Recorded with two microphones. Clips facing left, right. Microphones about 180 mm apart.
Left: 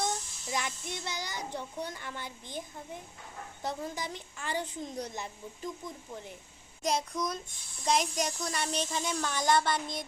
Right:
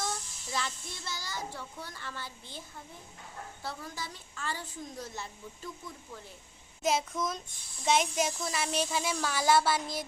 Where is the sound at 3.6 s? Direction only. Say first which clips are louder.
Left 5 dB; 20° left (ahead or behind).